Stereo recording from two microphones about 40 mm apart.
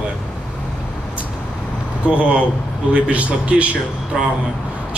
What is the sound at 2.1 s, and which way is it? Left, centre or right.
Speech, right.